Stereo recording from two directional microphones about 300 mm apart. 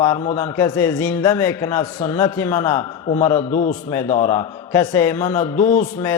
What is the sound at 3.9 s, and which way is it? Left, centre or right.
Mantra, centre.